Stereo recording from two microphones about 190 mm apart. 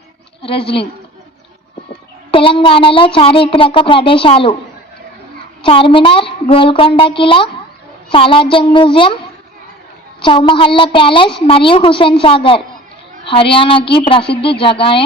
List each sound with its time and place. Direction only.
0.4 s a woman's voice: 30° left (ahead or behind)
2.3 s a woman's voice: 30° left (ahead or behind)
5.6 s a woman's voice: 30° left (ahead or behind)
10.2 s a woman's voice: 25° left (ahead or behind)